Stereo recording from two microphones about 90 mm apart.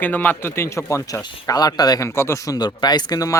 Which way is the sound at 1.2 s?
45° left (ahead or behind).